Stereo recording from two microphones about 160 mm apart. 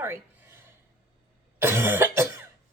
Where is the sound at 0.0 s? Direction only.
15° right (ahead or behind).